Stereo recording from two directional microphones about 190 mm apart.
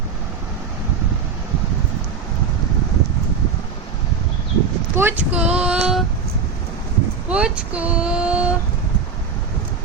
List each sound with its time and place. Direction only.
4.9 s speech: 10° right (ahead or behind)
7.3 s speech: 5° right (ahead or behind)